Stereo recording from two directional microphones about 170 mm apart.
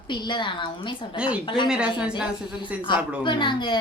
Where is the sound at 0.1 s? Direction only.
25° left (ahead or behind).